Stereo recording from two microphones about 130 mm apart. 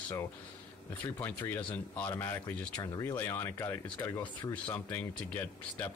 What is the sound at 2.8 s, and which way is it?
Speech, 25° left (ahead or behind).